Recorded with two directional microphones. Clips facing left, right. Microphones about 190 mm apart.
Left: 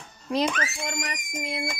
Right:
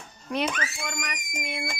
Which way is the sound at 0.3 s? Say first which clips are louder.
Left 3 dB; 30° left (ahead or behind).